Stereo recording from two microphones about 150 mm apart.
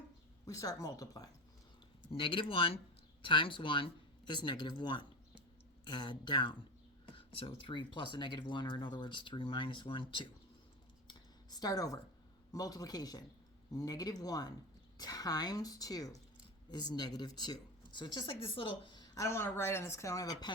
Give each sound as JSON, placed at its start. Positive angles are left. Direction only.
{"t": 0.4, "sound": "speech", "side_deg": 25}
{"t": 2.1, "sound": "speech", "side_deg": 35}
{"t": 11.1, "sound": "a sound", "side_deg": 25}
{"t": 12.5, "sound": "speech", "side_deg": 25}